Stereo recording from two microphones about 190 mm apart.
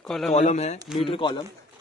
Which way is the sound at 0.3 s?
35° left (ahead or behind).